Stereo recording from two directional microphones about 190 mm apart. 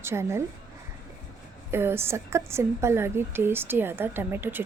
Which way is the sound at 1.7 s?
10° right (ahead or behind).